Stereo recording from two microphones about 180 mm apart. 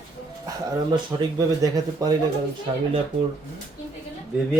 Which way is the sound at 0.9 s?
20° right (ahead or behind).